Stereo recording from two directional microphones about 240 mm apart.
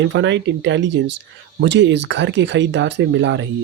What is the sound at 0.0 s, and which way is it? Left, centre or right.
Speech, right.